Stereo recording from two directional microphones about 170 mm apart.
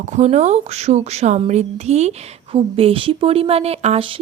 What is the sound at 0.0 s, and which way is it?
A woman's voice, 45° right (ahead or behind).